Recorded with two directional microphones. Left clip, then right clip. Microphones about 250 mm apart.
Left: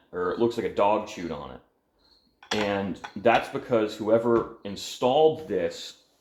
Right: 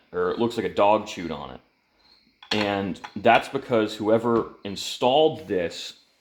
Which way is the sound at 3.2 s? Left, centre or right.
Right.